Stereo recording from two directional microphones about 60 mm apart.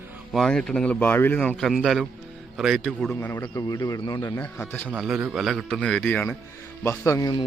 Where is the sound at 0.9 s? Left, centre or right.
Left.